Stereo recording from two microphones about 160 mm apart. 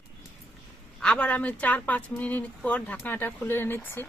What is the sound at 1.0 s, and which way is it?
Speech, 5° left (ahead or behind).